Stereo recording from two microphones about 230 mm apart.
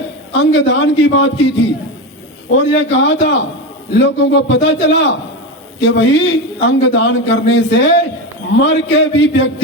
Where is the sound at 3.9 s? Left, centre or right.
Left.